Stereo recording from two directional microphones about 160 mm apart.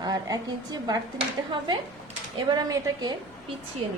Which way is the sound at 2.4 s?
25° right (ahead or behind).